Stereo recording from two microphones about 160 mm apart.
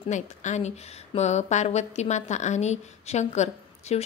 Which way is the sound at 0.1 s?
50° left (ahead or behind).